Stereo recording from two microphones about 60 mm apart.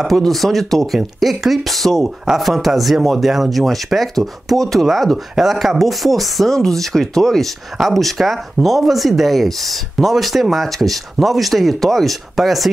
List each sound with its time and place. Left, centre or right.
0.2 s speech: centre